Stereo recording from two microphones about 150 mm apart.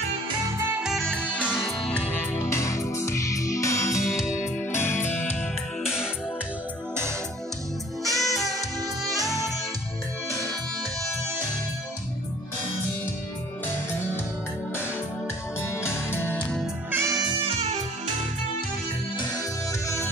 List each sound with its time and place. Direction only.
0.8 s music: 5° left (ahead or behind); by 4.0 s 20° left (ahead or behind)
4.1 s music: 5° right (ahead or behind)
4.6 s music: 15° left (ahead or behind)
8.0 s music: centre (ahead or behind)
15.6 s music: 15° left (ahead or behind)
16.9 s music: 20° right (ahead or behind)
17.5 s music: 45° right (ahead or behind)